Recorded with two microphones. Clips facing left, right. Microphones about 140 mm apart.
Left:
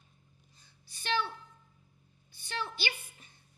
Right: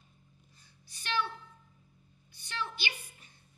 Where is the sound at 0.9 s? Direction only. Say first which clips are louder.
Left 1 dB; 30° left (ahead or behind).